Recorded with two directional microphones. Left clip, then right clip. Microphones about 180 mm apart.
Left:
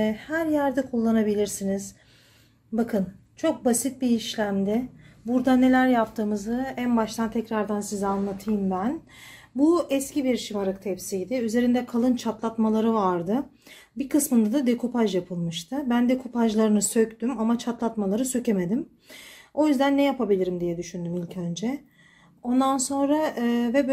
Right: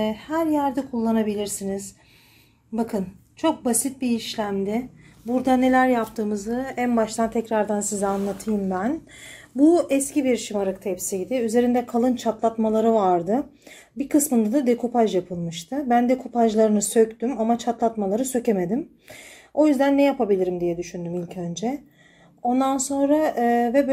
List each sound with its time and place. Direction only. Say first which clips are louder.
0.0 s speech: right 2 dB; 20° left (ahead or behind)